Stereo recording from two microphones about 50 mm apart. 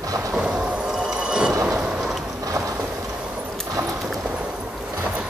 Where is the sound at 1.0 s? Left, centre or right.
Centre.